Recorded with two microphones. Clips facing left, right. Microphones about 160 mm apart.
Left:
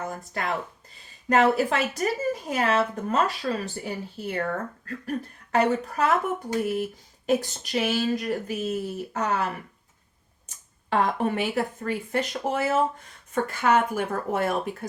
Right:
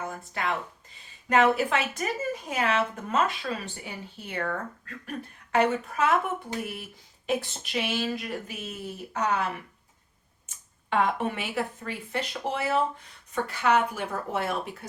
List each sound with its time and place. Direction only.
0.4 s a woman's voice: 40° left (ahead or behind)
7.3 s a woman's voice: 40° left (ahead or behind)